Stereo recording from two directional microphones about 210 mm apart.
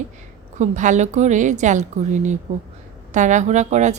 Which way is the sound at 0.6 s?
35° right (ahead or behind).